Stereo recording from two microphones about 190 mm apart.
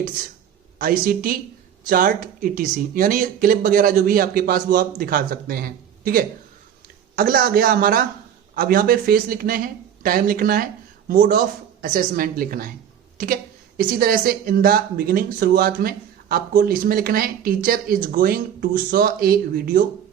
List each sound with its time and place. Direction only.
0.8 s speech: 50° right (ahead or behind)